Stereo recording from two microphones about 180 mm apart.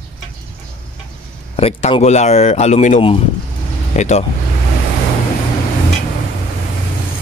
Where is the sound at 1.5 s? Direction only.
35° left (ahead or behind).